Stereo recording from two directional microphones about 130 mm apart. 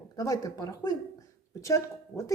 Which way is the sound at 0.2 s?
25° left (ahead or behind).